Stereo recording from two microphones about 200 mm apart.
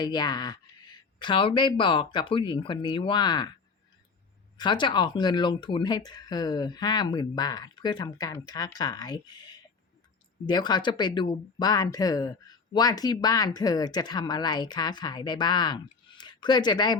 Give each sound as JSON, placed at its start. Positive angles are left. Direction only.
{"t": 0.0, "sound": "speech", "side_deg": 20}
{"t": 4.5, "sound": "speech", "side_deg": 25}